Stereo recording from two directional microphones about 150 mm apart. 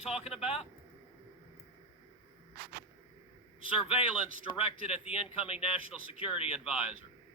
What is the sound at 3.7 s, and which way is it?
A man's voice, 40° left (ahead or behind).